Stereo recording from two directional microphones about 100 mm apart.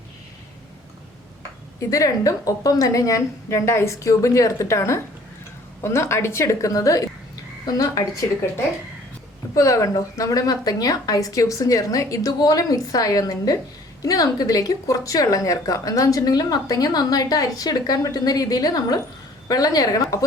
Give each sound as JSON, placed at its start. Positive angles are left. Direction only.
{"t": 1.9, "sound": "a woman's voice", "side_deg": 35}
{"t": 9.6, "sound": "speech", "side_deg": 35}